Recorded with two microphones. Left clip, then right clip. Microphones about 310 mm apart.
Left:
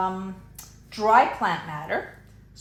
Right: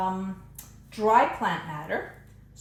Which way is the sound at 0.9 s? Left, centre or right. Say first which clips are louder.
Left 3 dB; left.